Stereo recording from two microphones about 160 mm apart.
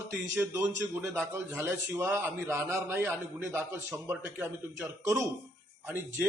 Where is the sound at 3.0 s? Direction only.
Centre (ahead or behind).